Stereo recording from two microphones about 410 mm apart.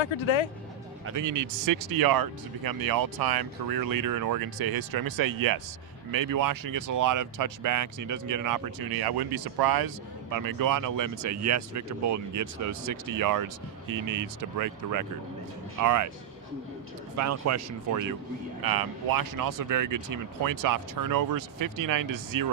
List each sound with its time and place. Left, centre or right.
0.0 s speech: left
1.0 s speech: right
17.2 s speech: right
18.6 s speech: right